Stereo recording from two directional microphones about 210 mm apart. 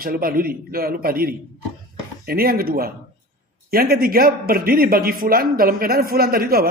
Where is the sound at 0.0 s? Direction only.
45° right (ahead or behind).